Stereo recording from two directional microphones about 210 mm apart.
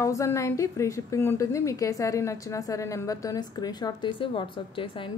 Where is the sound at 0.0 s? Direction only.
15° left (ahead or behind).